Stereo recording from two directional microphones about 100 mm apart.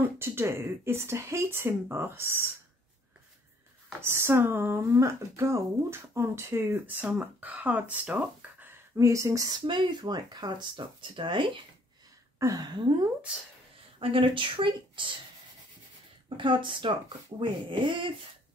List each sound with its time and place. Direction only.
0.0 s speech: 25° right (ahead or behind)
4.0 s speech: 25° right (ahead or behind)
8.9 s a sound: 30° right (ahead or behind)
9.7 s speech: 50° right (ahead or behind)
12.4 s a sound: 40° right (ahead or behind)
13.9 s speech: 65° right (ahead or behind)
16.3 s speech: 55° right (ahead or behind)